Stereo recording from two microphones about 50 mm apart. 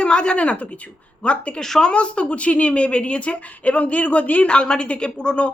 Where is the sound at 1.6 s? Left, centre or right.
Centre.